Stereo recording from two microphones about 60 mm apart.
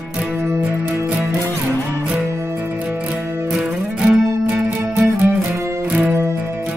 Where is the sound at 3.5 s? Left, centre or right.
Centre.